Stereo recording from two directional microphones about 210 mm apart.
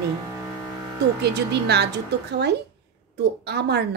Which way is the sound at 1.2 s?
50° right (ahead or behind).